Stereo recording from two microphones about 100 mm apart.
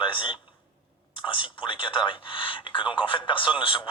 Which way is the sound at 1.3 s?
55° left (ahead or behind).